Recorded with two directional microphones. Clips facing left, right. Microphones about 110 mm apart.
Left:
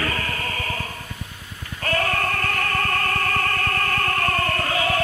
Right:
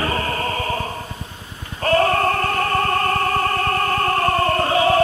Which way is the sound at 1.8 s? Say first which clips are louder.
Right 7 dB; 30° right (ahead or behind).